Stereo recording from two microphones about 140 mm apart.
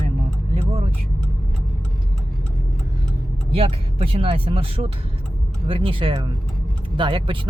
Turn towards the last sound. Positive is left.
turn(degrees=-35)  # may be behind; listen again after turning